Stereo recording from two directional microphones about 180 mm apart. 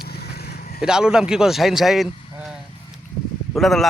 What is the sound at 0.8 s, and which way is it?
A man's voice, 5° right (ahead or behind).